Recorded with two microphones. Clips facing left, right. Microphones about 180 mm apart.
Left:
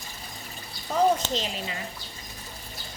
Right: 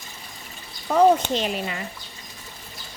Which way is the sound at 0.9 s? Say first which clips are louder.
Right 6 dB; 60° right (ahead or behind).